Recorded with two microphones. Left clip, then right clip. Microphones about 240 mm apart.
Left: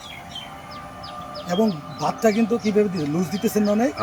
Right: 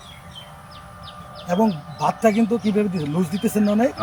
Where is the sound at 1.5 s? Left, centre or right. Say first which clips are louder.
Right 2 dB; centre.